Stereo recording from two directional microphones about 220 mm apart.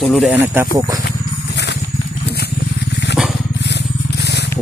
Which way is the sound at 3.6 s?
50° left (ahead or behind).